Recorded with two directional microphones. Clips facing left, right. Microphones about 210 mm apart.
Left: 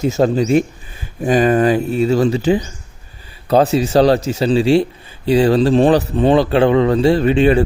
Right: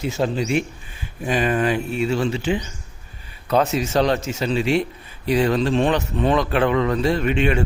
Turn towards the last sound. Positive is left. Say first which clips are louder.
# left 7 dB
turn(degrees=35)  # may be behind; listen again after turning